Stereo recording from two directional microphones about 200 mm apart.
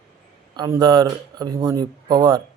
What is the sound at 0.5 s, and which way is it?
Speech, 20° right (ahead or behind).